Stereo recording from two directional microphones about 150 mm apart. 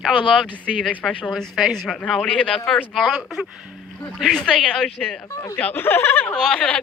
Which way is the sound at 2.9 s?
Centre (ahead or behind).